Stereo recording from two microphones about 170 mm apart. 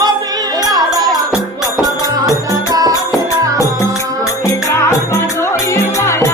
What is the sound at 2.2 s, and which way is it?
Music, 20° right (ahead or behind).